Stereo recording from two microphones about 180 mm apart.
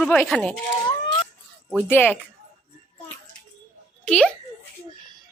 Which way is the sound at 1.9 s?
10° left (ahead or behind).